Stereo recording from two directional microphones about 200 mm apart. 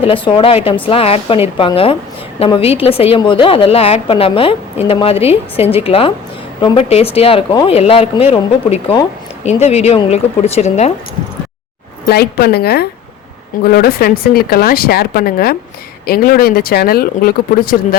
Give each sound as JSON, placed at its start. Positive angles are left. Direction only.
{"t": 0.0, "sound": "a woman's voice", "side_deg": 25}
{"t": 12.0, "sound": "speech", "side_deg": 50}